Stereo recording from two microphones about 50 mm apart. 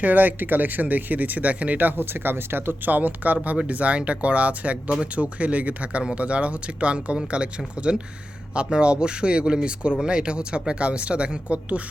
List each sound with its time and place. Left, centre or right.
0.0 s speech: right
2.0 s speech: right